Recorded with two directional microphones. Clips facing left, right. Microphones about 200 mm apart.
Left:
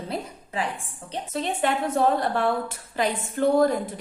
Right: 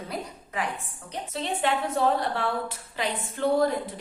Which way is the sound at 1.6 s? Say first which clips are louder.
Left 2 dB; 45° left (ahead or behind).